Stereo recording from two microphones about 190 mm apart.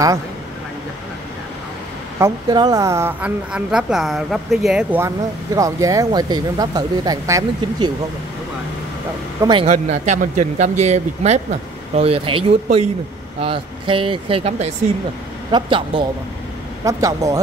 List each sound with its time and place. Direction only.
2.1 s a woman's voice: 20° right (ahead or behind)
9.4 s speech: 25° right (ahead or behind)
9.7 s a woman's voice: 40° right (ahead or behind); by 17.4 s 15° right (ahead or behind)